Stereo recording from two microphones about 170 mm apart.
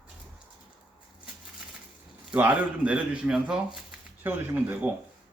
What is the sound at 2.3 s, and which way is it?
Speech, 10° right (ahead or behind).